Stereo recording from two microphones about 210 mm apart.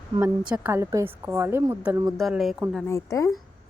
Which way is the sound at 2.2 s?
Centre (ahead or behind).